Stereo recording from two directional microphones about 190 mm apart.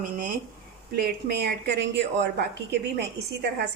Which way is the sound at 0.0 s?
45° right (ahead or behind).